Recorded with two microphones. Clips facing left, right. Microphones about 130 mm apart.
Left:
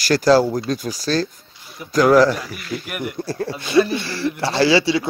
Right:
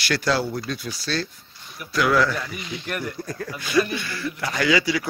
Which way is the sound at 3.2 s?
30° left (ahead or behind).